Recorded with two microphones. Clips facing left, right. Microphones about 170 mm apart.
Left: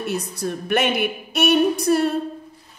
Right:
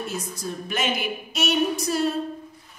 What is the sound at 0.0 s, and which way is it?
Speech, 65° left (ahead or behind).